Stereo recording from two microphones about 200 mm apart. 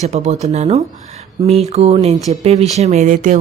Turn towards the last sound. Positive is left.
turn(degrees=-40)  # may be behind; listen again after turning